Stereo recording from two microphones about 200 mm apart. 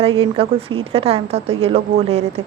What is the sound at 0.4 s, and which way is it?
A woman's voice, 30° right (ahead or behind).